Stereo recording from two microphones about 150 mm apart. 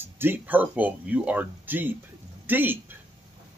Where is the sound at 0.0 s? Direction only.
15° right (ahead or behind).